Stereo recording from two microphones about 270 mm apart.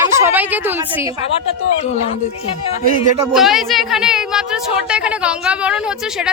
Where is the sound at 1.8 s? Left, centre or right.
Left.